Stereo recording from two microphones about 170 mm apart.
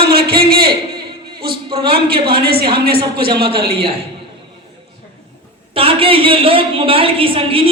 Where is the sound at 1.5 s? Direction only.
30° right (ahead or behind).